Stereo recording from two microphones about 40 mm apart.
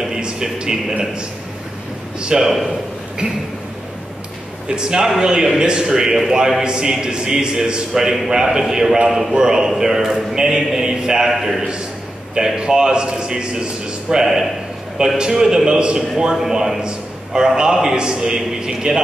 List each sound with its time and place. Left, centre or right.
0.0 s music: centre
2.1 s a man's voice: centre
2.4 s a man's voice: centre
4.6 s a man's voice: centre
12.5 s a man's voice: centre
14.2 s a man's voice: centre
16.8 s a sound: centre
17.9 s a man's voice: centre